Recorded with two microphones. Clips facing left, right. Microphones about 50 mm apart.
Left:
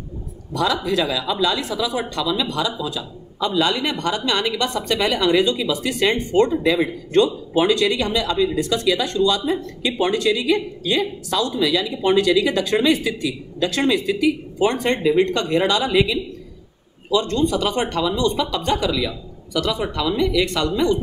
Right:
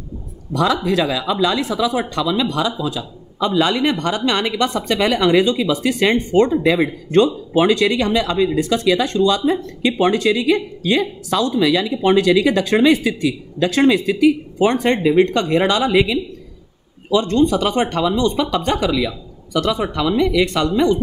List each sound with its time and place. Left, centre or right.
0.6 s speech: right